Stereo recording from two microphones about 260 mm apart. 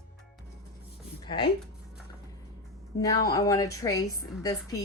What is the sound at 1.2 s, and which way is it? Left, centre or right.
Speech, centre.